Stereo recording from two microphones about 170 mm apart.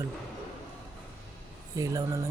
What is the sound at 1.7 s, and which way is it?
Speech, 20° right (ahead or behind).